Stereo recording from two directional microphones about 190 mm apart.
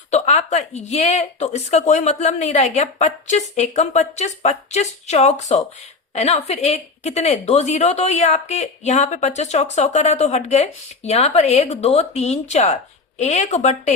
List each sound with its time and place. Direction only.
0.1 s speech: 35° left (ahead or behind)